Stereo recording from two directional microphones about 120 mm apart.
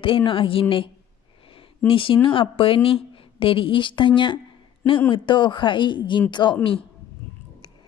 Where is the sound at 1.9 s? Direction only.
45° left (ahead or behind).